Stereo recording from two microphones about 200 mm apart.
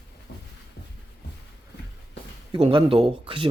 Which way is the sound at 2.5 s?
25° right (ahead or behind).